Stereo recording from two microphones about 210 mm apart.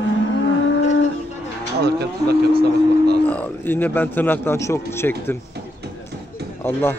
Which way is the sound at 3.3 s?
10° left (ahead or behind).